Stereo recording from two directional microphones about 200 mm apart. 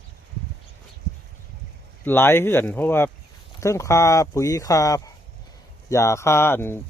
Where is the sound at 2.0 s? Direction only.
10° left (ahead or behind).